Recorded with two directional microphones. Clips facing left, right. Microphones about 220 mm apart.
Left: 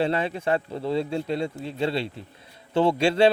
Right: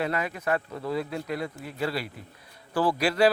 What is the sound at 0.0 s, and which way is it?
A man's voice, 30° left (ahead or behind).